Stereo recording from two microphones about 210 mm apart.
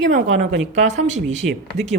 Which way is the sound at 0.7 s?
35° right (ahead or behind).